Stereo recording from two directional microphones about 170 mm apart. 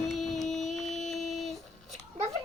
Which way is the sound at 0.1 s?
Centre (ahead or behind).